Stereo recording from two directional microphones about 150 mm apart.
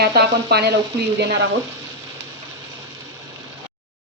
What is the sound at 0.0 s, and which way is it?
Speech, 90° right.